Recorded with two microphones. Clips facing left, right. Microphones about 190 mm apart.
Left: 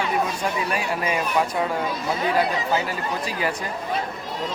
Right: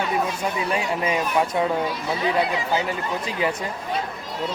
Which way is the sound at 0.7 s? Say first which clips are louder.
Right 1 dB; 25° right (ahead or behind).